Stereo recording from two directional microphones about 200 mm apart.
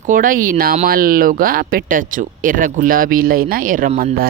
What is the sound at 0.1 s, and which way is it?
Speech, 45° right (ahead or behind).